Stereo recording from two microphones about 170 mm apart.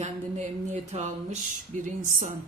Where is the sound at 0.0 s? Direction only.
40° right (ahead or behind).